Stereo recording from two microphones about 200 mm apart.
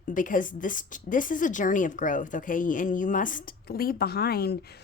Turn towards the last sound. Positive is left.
turn(degrees=50)  # may be behind; listen again after turning